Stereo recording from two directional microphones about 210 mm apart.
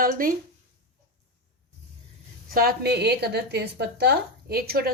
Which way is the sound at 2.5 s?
45° right (ahead or behind).